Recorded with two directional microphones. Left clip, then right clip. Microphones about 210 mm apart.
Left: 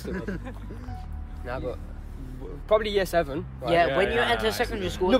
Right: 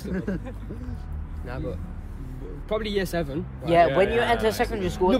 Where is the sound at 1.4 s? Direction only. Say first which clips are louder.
Left 2 dB; 20° left (ahead or behind).